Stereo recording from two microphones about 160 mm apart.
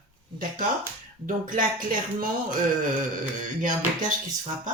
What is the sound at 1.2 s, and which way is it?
Speech, 55° right (ahead or behind).